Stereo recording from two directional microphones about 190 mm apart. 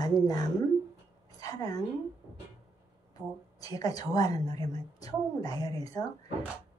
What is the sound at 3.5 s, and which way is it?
A woman's voice, 20° left (ahead or behind).